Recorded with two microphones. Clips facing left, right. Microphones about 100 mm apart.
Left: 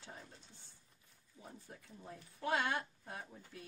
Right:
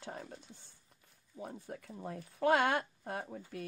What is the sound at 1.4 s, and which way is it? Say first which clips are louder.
Speech: right 10 dB; 65° right (ahead or behind).